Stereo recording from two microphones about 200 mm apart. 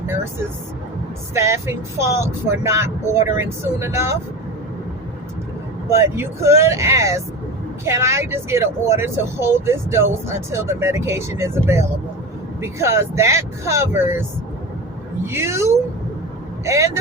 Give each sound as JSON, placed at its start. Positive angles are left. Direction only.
{"t": 1.3, "sound": "speech", "side_deg": -15}
{"t": 5.9, "sound": "speech", "side_deg": -15}
{"t": 15.3, "sound": "speech", "side_deg": -15}